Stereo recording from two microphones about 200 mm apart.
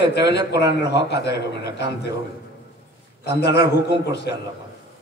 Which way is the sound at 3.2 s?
55° left (ahead or behind).